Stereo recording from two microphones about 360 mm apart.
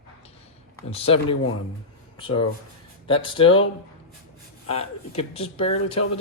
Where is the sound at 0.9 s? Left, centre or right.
Centre.